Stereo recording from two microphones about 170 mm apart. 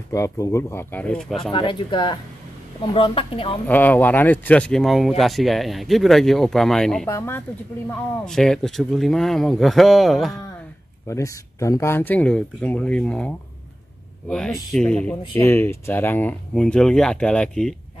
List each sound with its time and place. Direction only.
0.1 s speech: 20° left (ahead or behind)
1.5 s speech: 30° left (ahead or behind)
3.6 s speech: 10° left (ahead or behind)
7.1 s speech: 15° left (ahead or behind)
8.3 s speech: 5° left (ahead or behind)
11.1 s speech: 15° left (ahead or behind)
14.3 s speech: 5° left (ahead or behind)